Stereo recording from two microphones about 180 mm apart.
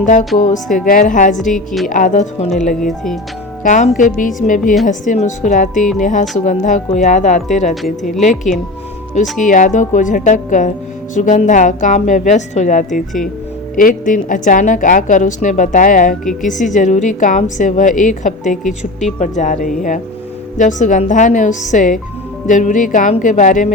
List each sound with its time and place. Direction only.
0.0 s a woman's voice: 45° left (ahead or behind)
1.5 s speech: centre (ahead or behind)
1.9 s a woman's voice: 45° left (ahead or behind)
2.8 s speech: centre (ahead or behind)
3.6 s a woman's voice: 45° left (ahead or behind)